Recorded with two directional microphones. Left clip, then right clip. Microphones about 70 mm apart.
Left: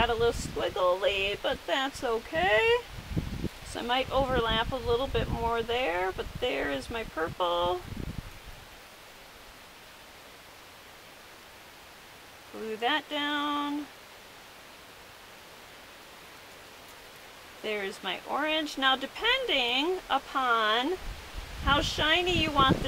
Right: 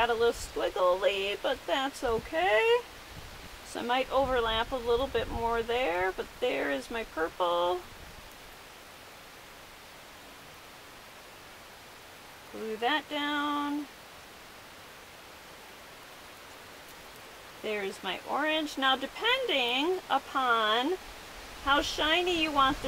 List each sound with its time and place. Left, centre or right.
0.0 s speech: centre
12.8 s speech: centre
17.6 s speech: centre